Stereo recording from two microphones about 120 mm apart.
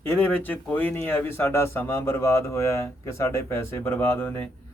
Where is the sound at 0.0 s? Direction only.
15° left (ahead or behind).